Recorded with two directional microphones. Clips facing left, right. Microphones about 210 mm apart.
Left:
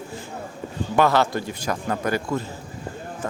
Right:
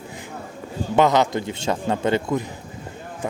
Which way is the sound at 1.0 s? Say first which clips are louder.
Right 2 dB; 20° right (ahead or behind).